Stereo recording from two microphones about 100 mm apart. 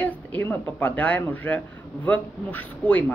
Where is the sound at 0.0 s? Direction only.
15° left (ahead or behind).